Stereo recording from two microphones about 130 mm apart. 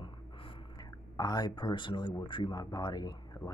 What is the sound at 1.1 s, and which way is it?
Speech, 30° left (ahead or behind).